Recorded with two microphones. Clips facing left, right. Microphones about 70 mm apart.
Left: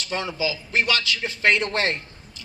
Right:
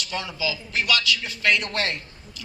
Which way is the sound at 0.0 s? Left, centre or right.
Left.